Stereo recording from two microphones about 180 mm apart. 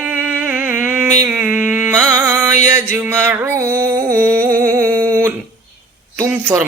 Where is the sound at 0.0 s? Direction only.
10° right (ahead or behind).